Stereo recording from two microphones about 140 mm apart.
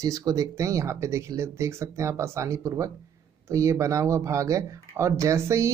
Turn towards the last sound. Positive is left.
turn(degrees=-20)  # may be behind; listen again after turning